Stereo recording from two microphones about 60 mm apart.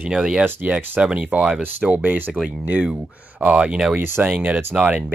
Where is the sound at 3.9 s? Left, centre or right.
Right.